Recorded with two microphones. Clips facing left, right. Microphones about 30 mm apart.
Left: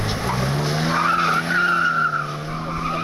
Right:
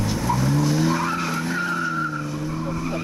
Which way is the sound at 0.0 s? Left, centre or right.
Left.